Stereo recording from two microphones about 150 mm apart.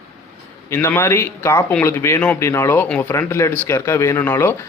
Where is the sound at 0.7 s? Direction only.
15° left (ahead or behind).